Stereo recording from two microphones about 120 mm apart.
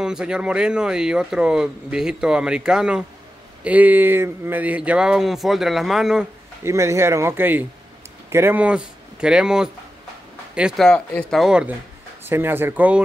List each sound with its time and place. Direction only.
0.0 s speech: 5° right (ahead or behind)
6.6 s a man's voice: 25° right (ahead or behind); by 9.7 s 5° right (ahead or behind)
10.8 s speech: 5° left (ahead or behind)
12.3 s speech: 15° right (ahead or behind)